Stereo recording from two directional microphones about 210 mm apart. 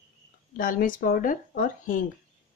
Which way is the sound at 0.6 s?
40° left (ahead or behind).